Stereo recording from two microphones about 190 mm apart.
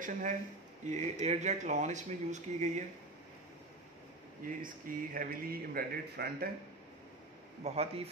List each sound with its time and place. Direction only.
0.0 s speech: 40° right (ahead or behind)
4.6 s speech: 45° right (ahead or behind)
7.6 s speech: 30° right (ahead or behind)